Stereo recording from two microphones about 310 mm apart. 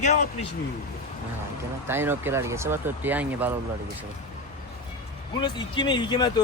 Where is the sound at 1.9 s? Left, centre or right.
Centre.